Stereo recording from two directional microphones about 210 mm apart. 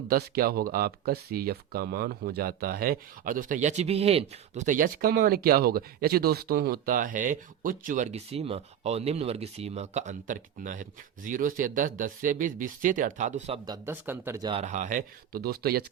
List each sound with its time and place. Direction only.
0.1 s speech: 45° right (ahead or behind)
13.7 s speech: 10° right (ahead or behind)
14.6 s speech: 35° right (ahead or behind)